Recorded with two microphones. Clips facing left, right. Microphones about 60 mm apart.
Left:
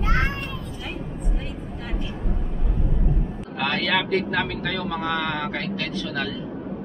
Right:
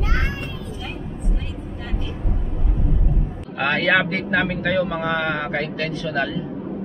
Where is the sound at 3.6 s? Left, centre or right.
Right.